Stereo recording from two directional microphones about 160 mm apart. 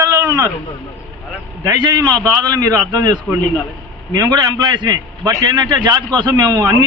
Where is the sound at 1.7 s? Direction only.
25° right (ahead or behind).